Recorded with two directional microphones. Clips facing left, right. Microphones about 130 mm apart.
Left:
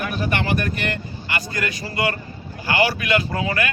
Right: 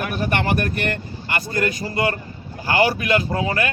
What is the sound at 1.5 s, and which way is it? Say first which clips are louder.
Speech: right 5 dB; 35° right (ahead or behind).